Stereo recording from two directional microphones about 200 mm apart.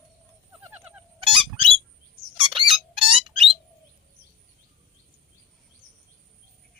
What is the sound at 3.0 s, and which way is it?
Bird, 25° right (ahead or behind).